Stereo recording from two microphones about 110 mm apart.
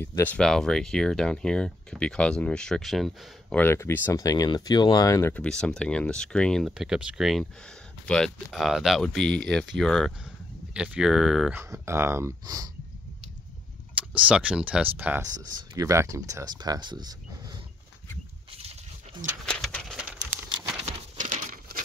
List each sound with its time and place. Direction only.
0.4 s speech: 5° left (ahead or behind)
3.5 s speech: 20° left (ahead or behind)
4.2 s speech: 30° left (ahead or behind)
5.3 s speech: 10° left (ahead or behind)
10.2 s speech: 10° right (ahead or behind)
11.5 s speech: 25° right (ahead or behind)
13.9 s speech: 10° right (ahead or behind)
15.2 s speech: 30° right (ahead or behind)
18.5 s a sound: 65° right (ahead or behind)
19.4 s pigeon: 5° left (ahead or behind)
20.8 s a sound: 90° right